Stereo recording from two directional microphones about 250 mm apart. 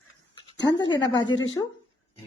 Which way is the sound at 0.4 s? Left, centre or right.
Centre.